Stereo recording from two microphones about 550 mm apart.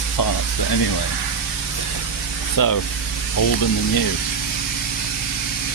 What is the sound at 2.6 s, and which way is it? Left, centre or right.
Speech, left.